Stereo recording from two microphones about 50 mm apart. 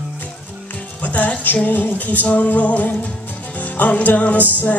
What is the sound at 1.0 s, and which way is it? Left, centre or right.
Music, left.